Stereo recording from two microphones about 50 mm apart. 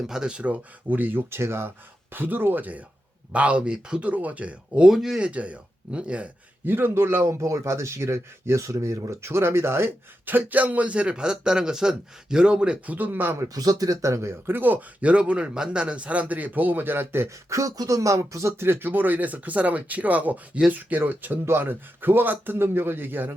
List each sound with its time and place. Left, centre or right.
0.1 s speech: centre
0.9 s speech: right
1.3 s speech: right
2.1 s speech: right; by 4.0 s centre
4.0 s speech: right
4.9 s speech: centre
5.2 s speech: right
6.7 s speech: right
7.3 s speech: right
10.2 s speech: right
14.0 s speech: right
14.4 s speech: right
17.2 s speech: right